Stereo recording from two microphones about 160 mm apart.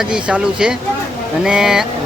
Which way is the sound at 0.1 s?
5° right (ahead or behind).